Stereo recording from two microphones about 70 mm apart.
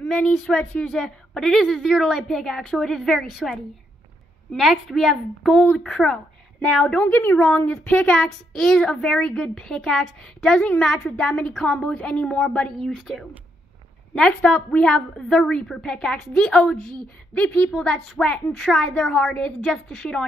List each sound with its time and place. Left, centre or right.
0.0 s a woman's voice: centre
4.6 s speech: centre
7.1 s a woman's voice: left
7.3 s a woman's voice: centre
14.1 s a woman's voice: centre
17.6 s speech: centre